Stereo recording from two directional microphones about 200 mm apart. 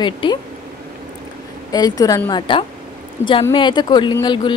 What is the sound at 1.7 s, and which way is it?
Speech, 20° left (ahead or behind).